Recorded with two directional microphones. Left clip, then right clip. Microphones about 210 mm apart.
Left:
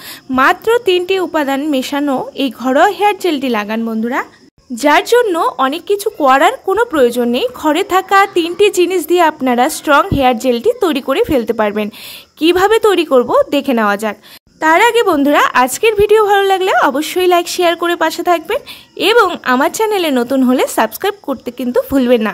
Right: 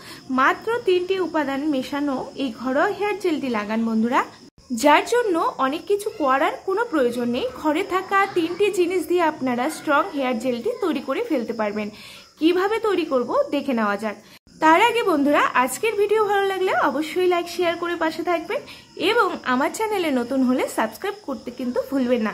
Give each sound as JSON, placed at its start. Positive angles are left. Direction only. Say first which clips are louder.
{"t": 0.3, "sound": "a woman's voice", "louder": "left 9 dB", "side_deg": 50}
{"t": 14.6, "sound": "a woman's voice", "louder": "left 7 dB", "side_deg": 40}